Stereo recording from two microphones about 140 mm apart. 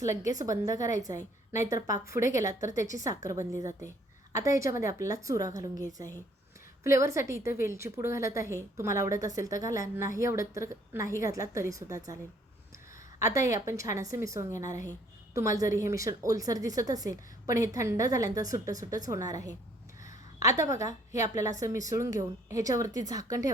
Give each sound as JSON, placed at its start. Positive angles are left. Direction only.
{"t": 0.0, "sound": "a woman's voice", "side_deg": -25}
{"t": 13.1, "sound": "a woman's voice", "side_deg": -20}
{"t": 20.6, "sound": "a woman's voice", "side_deg": -25}